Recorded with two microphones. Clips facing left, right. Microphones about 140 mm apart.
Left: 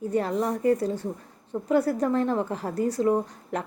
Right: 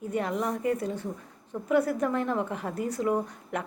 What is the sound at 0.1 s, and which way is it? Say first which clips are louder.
A woman's voice: left 3 dB; 35° left (ahead or behind).